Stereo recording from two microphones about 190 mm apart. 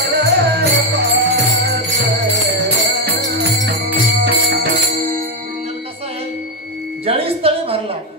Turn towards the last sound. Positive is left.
turn(degrees=-30)  # may be behind; listen again after turning